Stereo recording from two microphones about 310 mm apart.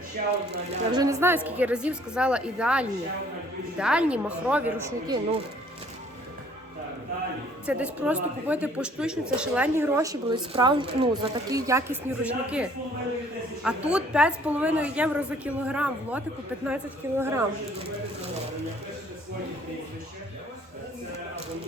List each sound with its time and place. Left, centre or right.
0.2 s speech: right
0.9 s speech: centre
7.7 s speech: centre